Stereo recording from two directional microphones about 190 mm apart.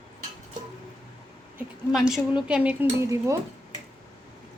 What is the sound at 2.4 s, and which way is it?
Speech, 5° right (ahead or behind).